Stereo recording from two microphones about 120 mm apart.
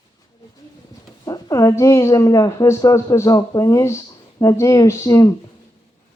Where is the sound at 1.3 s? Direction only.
30° left (ahead or behind).